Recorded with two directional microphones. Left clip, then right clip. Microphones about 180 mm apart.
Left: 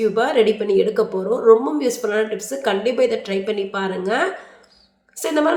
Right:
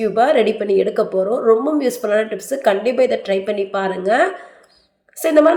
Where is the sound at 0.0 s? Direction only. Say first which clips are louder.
Right 2 dB; 15° right (ahead or behind).